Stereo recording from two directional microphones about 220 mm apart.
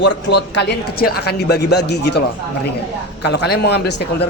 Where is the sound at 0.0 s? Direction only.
50° left (ahead or behind).